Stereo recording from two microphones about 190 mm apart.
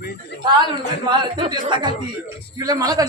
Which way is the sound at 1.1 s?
25° right (ahead or behind).